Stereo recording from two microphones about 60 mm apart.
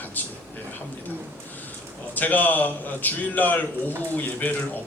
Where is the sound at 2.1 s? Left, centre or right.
Left.